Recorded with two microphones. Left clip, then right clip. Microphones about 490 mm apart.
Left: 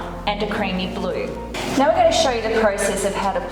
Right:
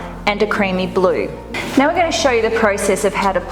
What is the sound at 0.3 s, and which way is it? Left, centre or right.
Speech, right.